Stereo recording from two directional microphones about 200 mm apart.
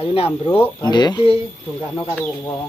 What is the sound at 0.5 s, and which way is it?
Speech, 10° left (ahead or behind).